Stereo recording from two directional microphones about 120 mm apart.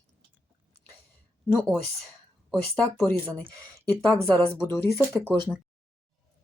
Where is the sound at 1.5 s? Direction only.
5° left (ahead or behind).